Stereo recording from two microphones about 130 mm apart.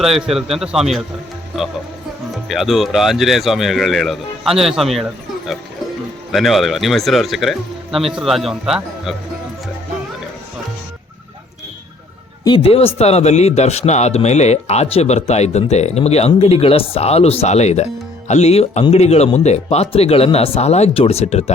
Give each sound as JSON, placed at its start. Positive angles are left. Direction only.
{"t": 0.0, "sound": "speech", "side_deg": 0}
{"t": 6.3, "sound": "speech", "side_deg": 0}
{"t": 12.5, "sound": "a man's voice", "side_deg": 45}